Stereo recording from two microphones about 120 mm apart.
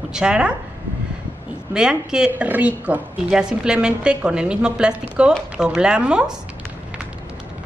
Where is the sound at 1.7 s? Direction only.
5° right (ahead or behind).